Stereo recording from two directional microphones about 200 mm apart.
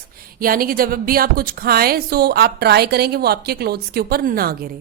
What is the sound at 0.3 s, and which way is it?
Speech, 45° right (ahead or behind).